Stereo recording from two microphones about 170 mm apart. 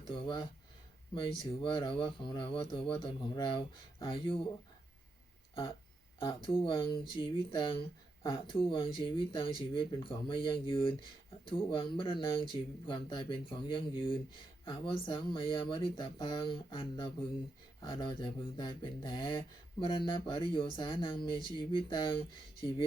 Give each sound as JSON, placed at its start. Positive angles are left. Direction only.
{"t": 0.0, "sound": "speech", "side_deg": 30}
{"t": 6.1, "sound": "speech", "side_deg": 30}